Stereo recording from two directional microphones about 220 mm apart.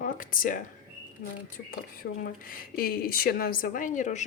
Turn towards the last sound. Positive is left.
turn(degrees=35)  # may be behind; listen again after turning